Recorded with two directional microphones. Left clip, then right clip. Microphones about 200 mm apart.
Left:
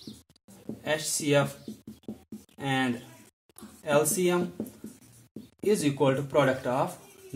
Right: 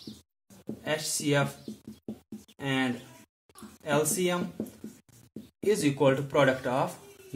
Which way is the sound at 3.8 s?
30° left (ahead or behind).